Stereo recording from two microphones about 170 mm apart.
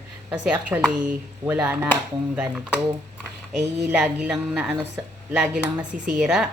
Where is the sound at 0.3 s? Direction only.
10° right (ahead or behind).